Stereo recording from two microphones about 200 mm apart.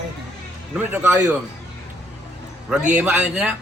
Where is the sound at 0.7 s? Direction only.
5° right (ahead or behind).